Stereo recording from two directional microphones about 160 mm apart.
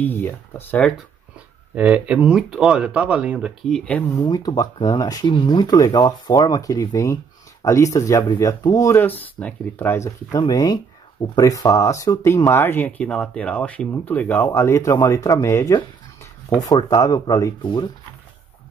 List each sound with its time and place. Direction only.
0.0 s speech: 10° left (ahead or behind)
1.8 s speech: 10° right (ahead or behind)
4.2 s speech: 25° left (ahead or behind)